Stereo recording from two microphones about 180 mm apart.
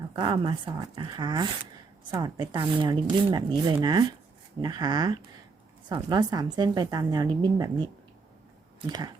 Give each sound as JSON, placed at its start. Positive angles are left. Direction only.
{"t": 0.2, "sound": "speech", "side_deg": -25}